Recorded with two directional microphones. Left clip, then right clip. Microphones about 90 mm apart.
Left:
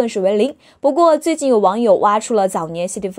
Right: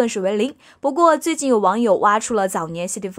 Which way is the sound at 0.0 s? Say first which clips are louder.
Left 4 dB; 20° left (ahead or behind).